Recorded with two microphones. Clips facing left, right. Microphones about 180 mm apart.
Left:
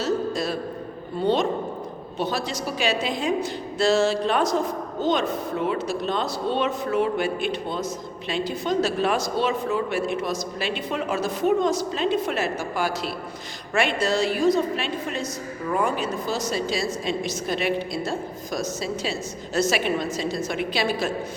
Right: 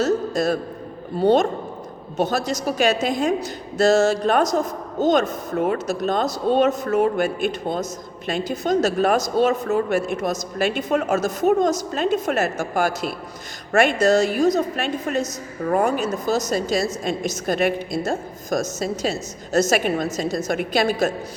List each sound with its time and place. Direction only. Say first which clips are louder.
0.0 s a man's voice: right 4 dB; 45° right (ahead or behind)